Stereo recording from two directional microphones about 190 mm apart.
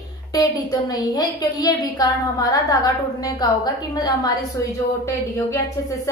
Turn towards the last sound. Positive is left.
turn(degrees=15)  # may be behind; listen again after turning